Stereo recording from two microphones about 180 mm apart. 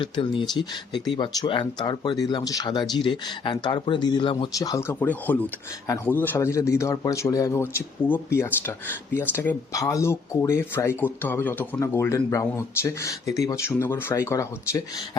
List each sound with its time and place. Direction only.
0.0 s speech: 30° left (ahead or behind)